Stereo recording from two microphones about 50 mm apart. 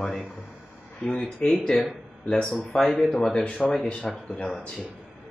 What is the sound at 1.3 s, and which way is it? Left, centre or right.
Speech, centre.